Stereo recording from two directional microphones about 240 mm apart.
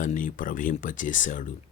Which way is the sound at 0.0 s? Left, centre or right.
Left.